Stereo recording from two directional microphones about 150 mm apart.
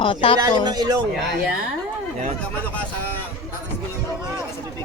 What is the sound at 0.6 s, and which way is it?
Speech, 25° right (ahead or behind).